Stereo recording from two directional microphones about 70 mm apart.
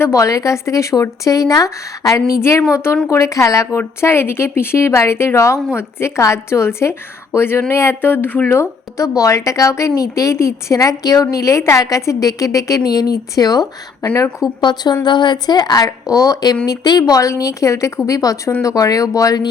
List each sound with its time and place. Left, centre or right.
0.0 s a woman's voice: left
9.0 s a woman's voice: left
14.6 s a woman's voice: left